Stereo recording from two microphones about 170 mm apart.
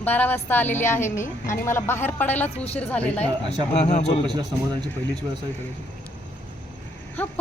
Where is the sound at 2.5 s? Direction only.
35° left (ahead or behind).